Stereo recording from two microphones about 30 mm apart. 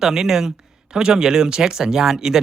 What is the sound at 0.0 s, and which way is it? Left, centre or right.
Speech, centre.